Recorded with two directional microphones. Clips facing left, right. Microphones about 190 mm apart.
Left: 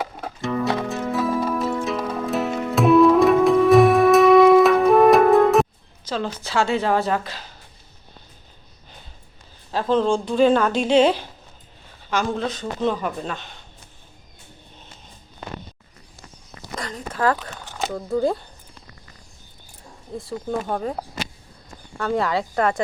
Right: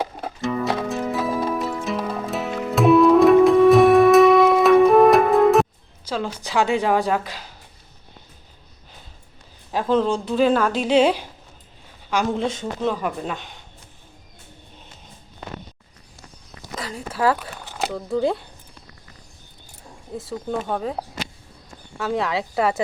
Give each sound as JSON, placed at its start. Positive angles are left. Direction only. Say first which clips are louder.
{"t": 0.3, "sound": "music", "louder": "left 1 dB", "side_deg": 0}
{"t": 6.1, "sound": "a woman's voice", "louder": "even", "side_deg": -10}
{"t": 9.7, "sound": "a woman's voice", "louder": "even", "side_deg": -5}
{"t": 12.8, "sound": "a woman's voice", "louder": "left 1 dB", "side_deg": -5}
{"t": 16.7, "sound": "speech", "louder": "even", "side_deg": -5}
{"t": 20.1, "sound": "a woman's voice", "louder": "even", "side_deg": 0}